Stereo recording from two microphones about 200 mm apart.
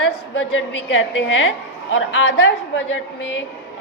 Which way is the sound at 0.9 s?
70° left (ahead or behind).